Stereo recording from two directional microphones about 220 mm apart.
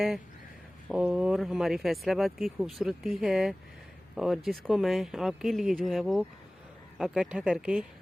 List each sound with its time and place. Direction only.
0.9 s speech: 5° right (ahead or behind)